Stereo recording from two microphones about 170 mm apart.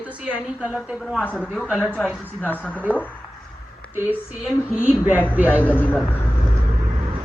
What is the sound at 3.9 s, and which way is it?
Speech, 5° right (ahead or behind).